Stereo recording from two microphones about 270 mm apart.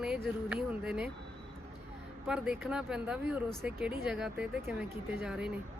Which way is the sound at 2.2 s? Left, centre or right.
Centre.